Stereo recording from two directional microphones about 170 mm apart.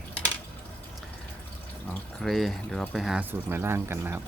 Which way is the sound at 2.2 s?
Centre (ahead or behind).